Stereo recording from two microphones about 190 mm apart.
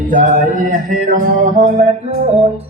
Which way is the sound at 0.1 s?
45° right (ahead or behind).